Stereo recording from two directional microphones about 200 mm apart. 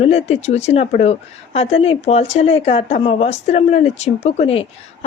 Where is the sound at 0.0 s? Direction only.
30° left (ahead or behind).